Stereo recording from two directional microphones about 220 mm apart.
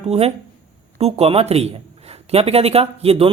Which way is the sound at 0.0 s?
30° right (ahead or behind).